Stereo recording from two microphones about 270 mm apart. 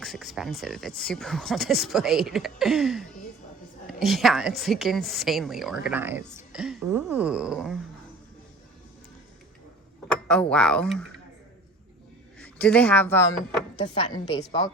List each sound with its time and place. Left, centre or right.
0.0 s a woman's voice: centre
10.1 s speech: centre
12.4 s a woman's voice: centre